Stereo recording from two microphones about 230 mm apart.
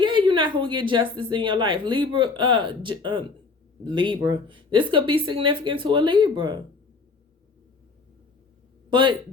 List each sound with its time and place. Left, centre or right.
0.0 s a woman's voice: right
8.9 s a man's voice: right